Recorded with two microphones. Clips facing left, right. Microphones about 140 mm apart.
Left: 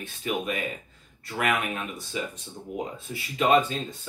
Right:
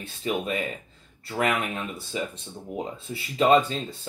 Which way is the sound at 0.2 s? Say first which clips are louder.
Right 2 dB; 30° right (ahead or behind).